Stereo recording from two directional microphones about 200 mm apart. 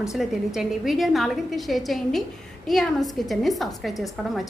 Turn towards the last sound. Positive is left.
turn(degrees=0)  # may be behind; listen again after turning